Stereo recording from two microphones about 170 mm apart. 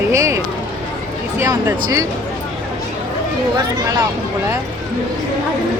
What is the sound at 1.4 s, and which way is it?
Speech, 20° right (ahead or behind).